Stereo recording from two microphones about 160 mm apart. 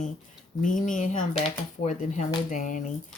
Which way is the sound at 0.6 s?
55° left (ahead or behind).